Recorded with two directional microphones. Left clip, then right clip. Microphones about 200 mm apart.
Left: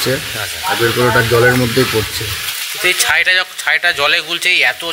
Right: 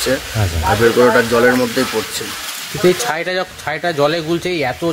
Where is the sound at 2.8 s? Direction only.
5° right (ahead or behind).